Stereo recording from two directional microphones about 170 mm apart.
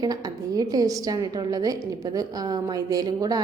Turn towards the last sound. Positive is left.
turn(degrees=-20)  # may be behind; listen again after turning